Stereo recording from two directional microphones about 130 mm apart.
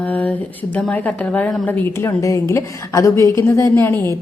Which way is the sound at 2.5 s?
25° left (ahead or behind).